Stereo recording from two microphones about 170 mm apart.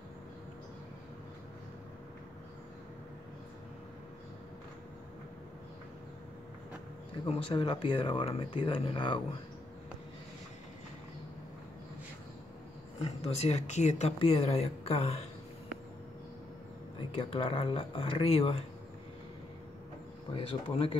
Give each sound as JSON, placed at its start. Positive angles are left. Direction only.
{"t": 7.2, "sound": "speech", "side_deg": 30}
{"t": 13.0, "sound": "speech", "side_deg": 40}
{"t": 17.1, "sound": "speech", "side_deg": 30}
{"t": 20.3, "sound": "speech", "side_deg": 30}